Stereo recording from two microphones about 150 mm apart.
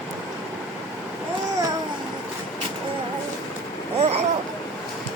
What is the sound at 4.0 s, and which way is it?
Vehicle, 45° right (ahead or behind).